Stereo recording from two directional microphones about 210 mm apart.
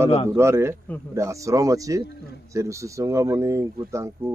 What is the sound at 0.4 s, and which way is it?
Speech, 10° right (ahead or behind).